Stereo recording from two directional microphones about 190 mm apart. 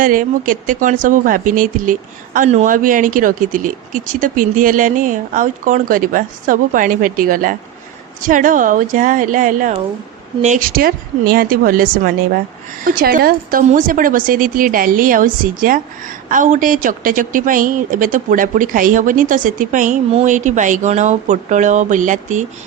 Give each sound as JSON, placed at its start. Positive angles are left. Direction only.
{"t": 0.0, "sound": "speech", "side_deg": -45}